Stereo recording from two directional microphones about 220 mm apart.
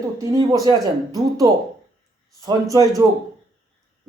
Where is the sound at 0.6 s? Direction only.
15° right (ahead or behind).